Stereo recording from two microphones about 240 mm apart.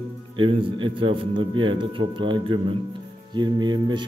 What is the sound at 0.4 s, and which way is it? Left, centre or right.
A man's voice, right.